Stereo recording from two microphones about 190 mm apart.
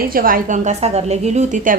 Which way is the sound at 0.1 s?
50° right (ahead or behind).